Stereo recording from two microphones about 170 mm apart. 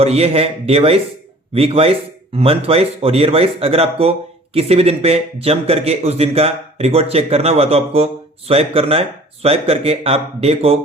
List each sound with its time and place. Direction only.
0.0 s a man's voice: 35° right (ahead or behind)